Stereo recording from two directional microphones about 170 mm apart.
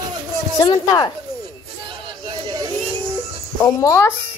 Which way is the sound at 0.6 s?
25° left (ahead or behind).